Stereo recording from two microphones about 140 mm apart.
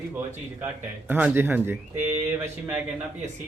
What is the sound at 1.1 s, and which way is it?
Speech, 15° right (ahead or behind).